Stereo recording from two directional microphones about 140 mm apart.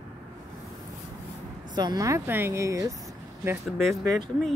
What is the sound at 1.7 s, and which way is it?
Speech, 30° right (ahead or behind).